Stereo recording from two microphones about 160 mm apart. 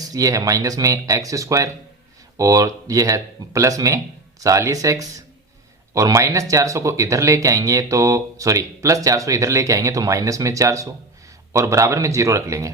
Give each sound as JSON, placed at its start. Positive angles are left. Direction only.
{"t": 0.1, "sound": "speech", "side_deg": -20}